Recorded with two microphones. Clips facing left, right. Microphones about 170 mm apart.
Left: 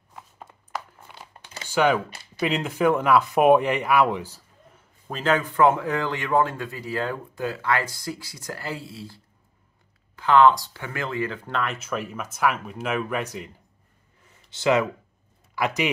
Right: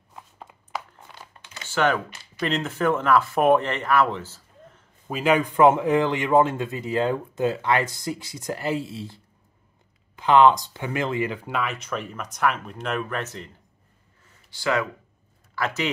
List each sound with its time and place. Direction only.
0.7 s a sound: 5° left (ahead or behind)
1.7 s speech: 10° left (ahead or behind)
5.0 s speech: 10° right (ahead or behind); by 13.5 s 10° left (ahead or behind)
14.5 s speech: 20° left (ahead or behind)